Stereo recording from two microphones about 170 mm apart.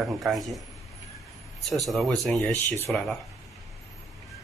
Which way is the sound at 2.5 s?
10° left (ahead or behind).